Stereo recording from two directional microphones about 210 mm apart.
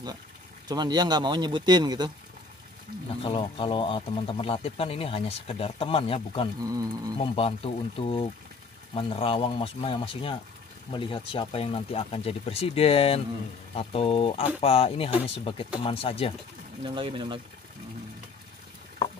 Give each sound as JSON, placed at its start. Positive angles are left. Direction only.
{"t": 0.7, "sound": "speech", "side_deg": -20}
{"t": 3.2, "sound": "speech", "side_deg": 25}
{"t": 6.6, "sound": "insect", "side_deg": -15}
{"t": 7.3, "sound": "speech", "side_deg": 25}
{"t": 16.8, "sound": "speech", "side_deg": -25}